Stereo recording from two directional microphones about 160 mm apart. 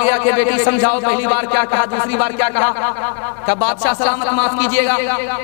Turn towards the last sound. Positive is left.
turn(degrees=15)  # may be behind; listen again after turning